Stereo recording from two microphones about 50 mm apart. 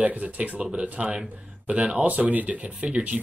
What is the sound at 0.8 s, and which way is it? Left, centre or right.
Speech, right.